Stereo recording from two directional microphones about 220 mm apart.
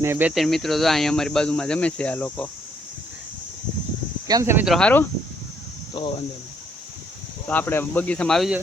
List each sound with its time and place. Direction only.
0.0 s speech: 10° right (ahead or behind); by 2.5 s 5° left (ahead or behind)
4.3 s speech: 15° right (ahead or behind); by 5.0 s 5° left (ahead or behind)
5.9 s speech: 25° left (ahead or behind)
7.4 s speech: 10° left (ahead or behind)